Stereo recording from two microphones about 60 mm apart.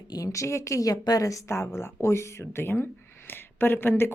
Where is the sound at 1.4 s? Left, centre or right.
Left.